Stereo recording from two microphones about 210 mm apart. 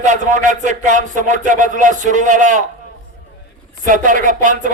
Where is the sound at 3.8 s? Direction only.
40° right (ahead or behind).